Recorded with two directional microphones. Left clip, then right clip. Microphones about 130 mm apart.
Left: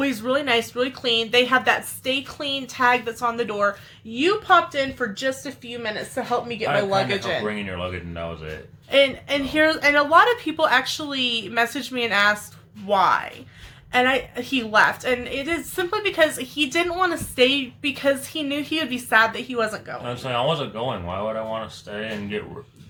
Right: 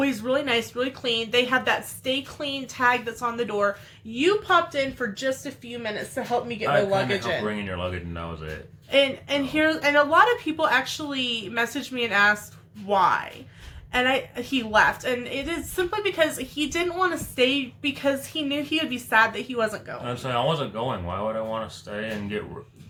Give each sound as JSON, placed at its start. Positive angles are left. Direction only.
{"t": 0.0, "sound": "speech", "side_deg": 25}
{"t": 7.4, "sound": "speech", "side_deg": -15}
{"t": 8.9, "sound": "speech", "side_deg": 25}
{"t": 20.1, "sound": "speech", "side_deg": -20}